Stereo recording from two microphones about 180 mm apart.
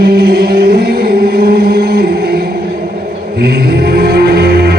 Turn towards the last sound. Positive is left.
turn(degrees=-60)  # may be behind; listen again after turning